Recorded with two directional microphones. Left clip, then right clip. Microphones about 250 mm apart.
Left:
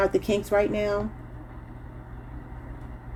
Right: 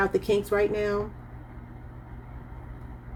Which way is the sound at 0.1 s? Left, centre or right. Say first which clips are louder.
Even; left.